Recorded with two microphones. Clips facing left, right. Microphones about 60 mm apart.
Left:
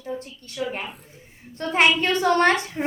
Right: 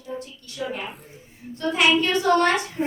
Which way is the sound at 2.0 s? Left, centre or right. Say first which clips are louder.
Even; left.